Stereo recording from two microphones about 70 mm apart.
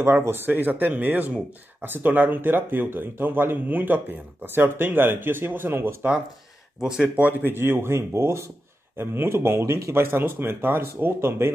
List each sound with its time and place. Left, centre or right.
0.0 s speech: right
6.8 s speech: centre
7.2 s speech: right